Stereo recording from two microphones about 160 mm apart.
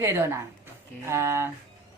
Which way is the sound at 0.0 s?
15° right (ahead or behind).